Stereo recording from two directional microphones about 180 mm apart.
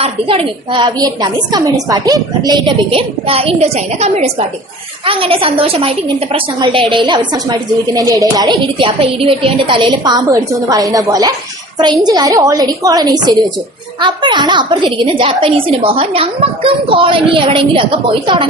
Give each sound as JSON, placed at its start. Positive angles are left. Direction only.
{"t": 0.0, "sound": "a woman's voice", "side_deg": -30}